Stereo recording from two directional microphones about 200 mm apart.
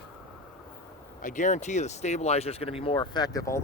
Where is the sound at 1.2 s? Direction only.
40° left (ahead or behind).